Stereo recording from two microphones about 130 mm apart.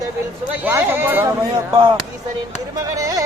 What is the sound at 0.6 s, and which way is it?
Speech, 15° right (ahead or behind).